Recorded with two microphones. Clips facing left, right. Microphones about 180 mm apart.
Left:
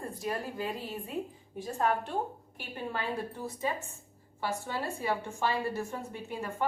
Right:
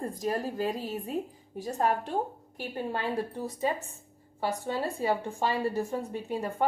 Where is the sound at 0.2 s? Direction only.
40° right (ahead or behind).